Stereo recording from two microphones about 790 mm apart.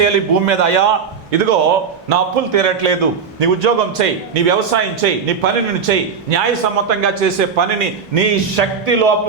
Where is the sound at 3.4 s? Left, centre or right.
Right.